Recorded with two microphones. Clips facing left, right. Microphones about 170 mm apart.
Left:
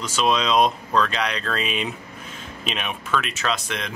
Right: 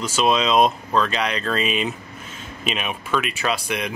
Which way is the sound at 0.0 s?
5° right (ahead or behind).